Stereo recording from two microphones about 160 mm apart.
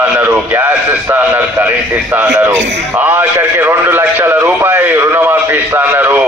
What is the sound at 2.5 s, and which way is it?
Speech, 90° right.